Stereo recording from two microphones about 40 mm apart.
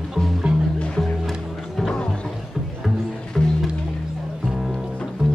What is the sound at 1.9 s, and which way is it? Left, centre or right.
Music, centre.